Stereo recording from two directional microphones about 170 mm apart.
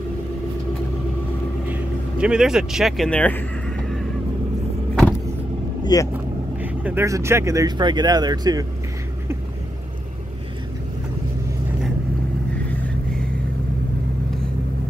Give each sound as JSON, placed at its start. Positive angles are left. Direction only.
{"t": 1.7, "sound": "vehicle", "side_deg": -5}
{"t": 5.9, "sound": "speech", "side_deg": 25}
{"t": 6.6, "sound": "speech", "side_deg": -10}